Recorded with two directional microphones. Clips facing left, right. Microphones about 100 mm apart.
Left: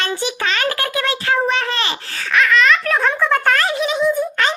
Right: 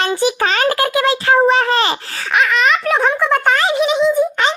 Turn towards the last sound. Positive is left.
turn(degrees=-20)  # may be behind; listen again after turning